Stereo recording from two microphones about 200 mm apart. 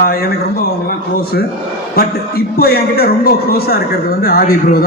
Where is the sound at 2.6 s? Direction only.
50° left (ahead or behind).